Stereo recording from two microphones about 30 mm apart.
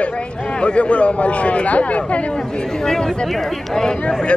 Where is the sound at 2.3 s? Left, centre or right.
Left.